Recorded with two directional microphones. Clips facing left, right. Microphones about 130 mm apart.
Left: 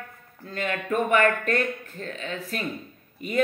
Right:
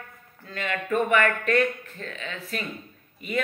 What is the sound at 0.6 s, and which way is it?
Speech, 40° left (ahead or behind).